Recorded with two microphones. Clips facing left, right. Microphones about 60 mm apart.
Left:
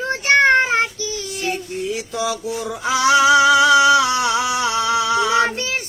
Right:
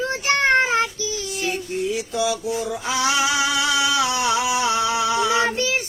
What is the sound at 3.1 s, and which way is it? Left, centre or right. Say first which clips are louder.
Female singing: left 10 dB; left.